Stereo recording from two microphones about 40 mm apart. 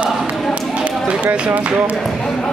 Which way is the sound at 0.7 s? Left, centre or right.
Right.